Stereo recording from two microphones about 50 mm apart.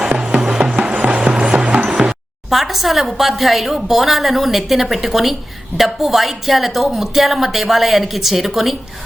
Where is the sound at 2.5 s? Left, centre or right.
Centre.